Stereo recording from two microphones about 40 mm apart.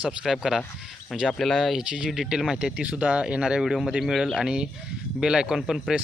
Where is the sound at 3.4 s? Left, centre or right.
Centre.